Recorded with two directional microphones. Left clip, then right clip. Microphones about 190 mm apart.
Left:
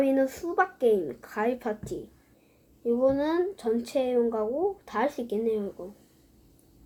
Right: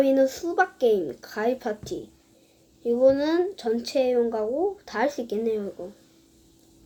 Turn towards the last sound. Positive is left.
turn(degrees=-15)  # may be behind; listen again after turning